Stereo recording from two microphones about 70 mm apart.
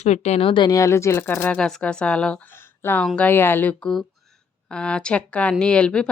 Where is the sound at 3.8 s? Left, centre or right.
Centre.